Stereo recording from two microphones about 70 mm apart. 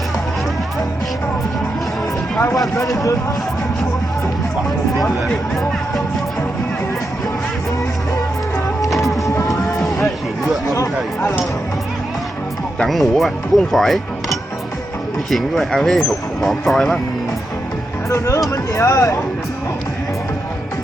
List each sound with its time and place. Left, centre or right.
2.9 s speech: left
8.9 s printer: centre
9.5 s music: centre
12.9 s speech: centre
18.1 s speech: left